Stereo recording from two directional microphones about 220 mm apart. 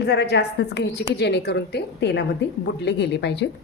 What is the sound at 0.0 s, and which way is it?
A woman's voice, 50° left (ahead or behind).